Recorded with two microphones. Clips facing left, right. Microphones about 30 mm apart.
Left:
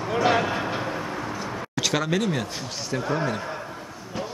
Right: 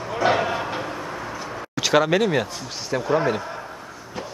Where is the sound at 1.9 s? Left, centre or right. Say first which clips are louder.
Right 8 dB; centre.